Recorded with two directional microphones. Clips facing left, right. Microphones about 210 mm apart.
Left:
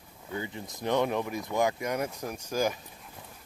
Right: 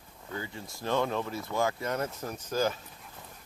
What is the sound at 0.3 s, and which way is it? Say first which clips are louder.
Speech: left 3 dB; 20° left (ahead or behind).